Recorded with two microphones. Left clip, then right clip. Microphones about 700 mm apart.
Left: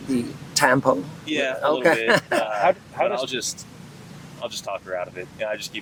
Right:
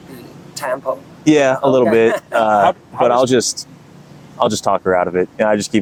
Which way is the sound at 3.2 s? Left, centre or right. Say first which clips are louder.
Right 13 dB; right.